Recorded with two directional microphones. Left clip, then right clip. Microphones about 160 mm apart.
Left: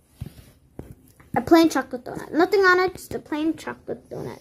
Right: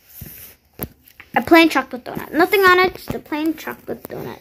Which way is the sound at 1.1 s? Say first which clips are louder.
Right 5 dB; 15° left (ahead or behind).